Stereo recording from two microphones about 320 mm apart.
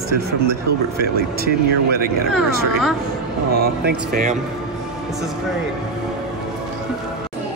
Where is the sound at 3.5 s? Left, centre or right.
Right.